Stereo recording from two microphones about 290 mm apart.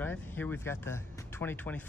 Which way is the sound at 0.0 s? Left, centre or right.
Centre.